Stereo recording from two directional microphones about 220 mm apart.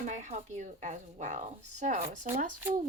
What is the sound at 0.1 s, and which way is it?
Speech, 35° right (ahead or behind).